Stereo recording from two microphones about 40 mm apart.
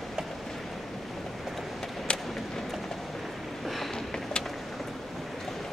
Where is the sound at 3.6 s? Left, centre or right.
Centre.